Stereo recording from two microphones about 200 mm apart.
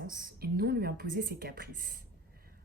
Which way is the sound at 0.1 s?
45° right (ahead or behind).